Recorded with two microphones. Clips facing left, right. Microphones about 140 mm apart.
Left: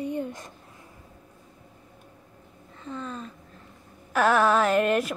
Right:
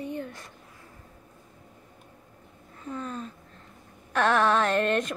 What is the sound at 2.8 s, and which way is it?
Speech, 5° right (ahead or behind).